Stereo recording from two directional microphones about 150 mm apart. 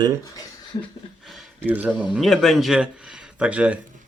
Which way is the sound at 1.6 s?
10° right (ahead or behind).